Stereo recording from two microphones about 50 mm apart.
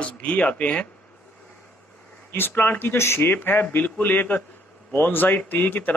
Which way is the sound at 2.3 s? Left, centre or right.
Left.